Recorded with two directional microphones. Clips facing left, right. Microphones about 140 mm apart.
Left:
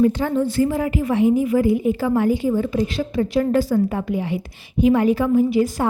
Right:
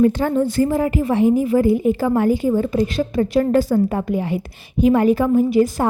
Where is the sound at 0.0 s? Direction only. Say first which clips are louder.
Right 2 dB; 45° right (ahead or behind).